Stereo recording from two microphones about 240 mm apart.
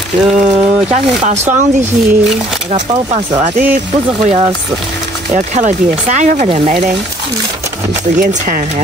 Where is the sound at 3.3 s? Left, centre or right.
Right.